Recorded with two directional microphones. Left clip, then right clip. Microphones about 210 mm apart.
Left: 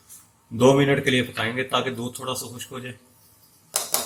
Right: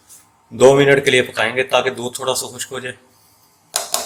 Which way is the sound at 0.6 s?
30° right (ahead or behind).